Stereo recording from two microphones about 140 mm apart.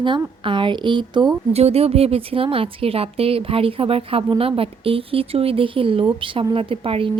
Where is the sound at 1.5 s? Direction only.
45° right (ahead or behind).